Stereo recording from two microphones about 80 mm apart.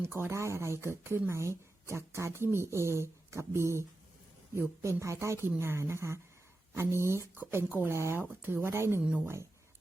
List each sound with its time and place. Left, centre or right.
0.0 s a woman's voice: right
7.3 s speech: right
9.0 s speech: centre
9.2 s a woman's voice: right